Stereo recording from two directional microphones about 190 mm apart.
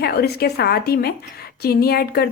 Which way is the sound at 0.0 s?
55° left (ahead or behind).